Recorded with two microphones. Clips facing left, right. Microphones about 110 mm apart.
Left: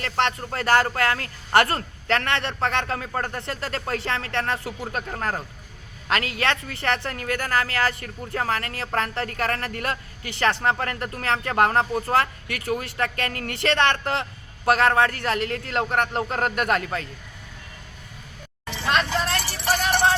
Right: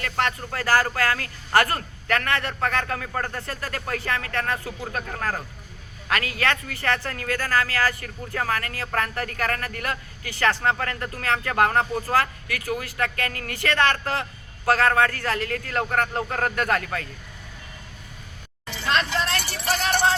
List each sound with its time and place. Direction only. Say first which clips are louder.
0.0 s speech: left 2 dB; 25° left (ahead or behind)
18.9 s vehicle: left 1 dB; 15° left (ahead or behind)